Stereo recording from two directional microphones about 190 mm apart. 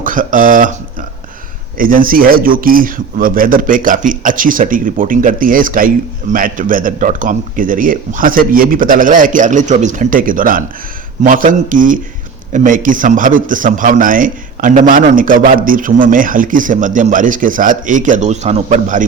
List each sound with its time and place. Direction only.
0.0 s speech: 45° right (ahead or behind)
1.8 s a man's voice: 45° right (ahead or behind)